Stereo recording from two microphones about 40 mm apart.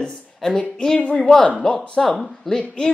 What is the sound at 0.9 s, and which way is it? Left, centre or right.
Speech, left.